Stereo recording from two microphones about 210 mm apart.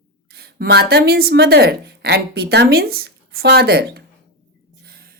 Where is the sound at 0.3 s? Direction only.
50° right (ahead or behind).